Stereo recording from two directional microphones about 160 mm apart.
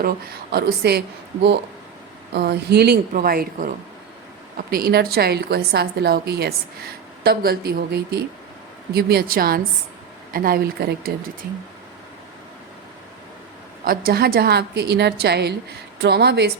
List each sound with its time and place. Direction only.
0.5 s a woman's voice: 90° right
3.1 s a woman's voice: 65° right (ahead or behind)
13.8 s a woman's voice: 65° right (ahead or behind); by 16.5 s 90° right